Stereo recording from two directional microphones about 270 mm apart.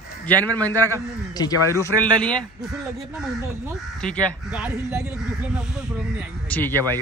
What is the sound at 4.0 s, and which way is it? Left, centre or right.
Speech, centre.